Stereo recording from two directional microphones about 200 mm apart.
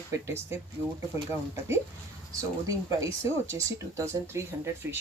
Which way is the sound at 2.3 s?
15° right (ahead or behind).